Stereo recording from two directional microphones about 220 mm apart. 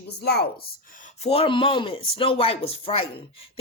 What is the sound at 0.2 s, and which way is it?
Speech, 45° left (ahead or behind).